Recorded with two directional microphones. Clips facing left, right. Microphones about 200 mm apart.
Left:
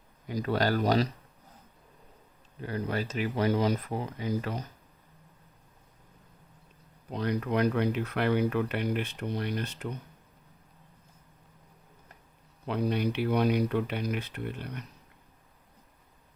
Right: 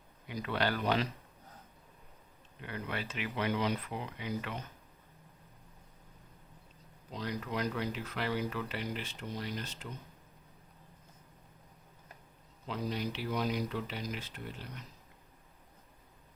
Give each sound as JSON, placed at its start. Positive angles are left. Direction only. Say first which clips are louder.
{"t": 0.3, "sound": "speech", "louder": "left 6 dB", "side_deg": 40}
{"t": 2.6, "sound": "speech", "louder": "left 8 dB", "side_deg": 40}
{"t": 7.1, "sound": "speech", "louder": "left 8 dB", "side_deg": 55}
{"t": 12.6, "sound": "speech", "louder": "left 8 dB", "side_deg": 60}